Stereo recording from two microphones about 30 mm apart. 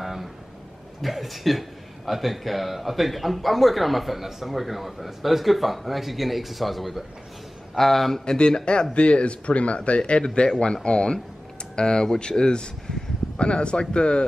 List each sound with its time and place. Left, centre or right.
0.0 s a sound: centre
1.0 s a man's voice: centre
8.3 s speech: left